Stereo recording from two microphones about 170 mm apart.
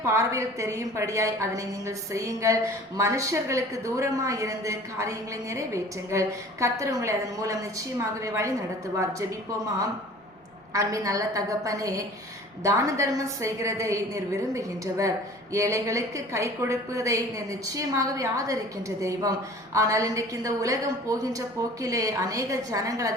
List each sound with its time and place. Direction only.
0.0 s a woman's voice: 15° right (ahead or behind)
10.8 s a woman's voice: 20° right (ahead or behind)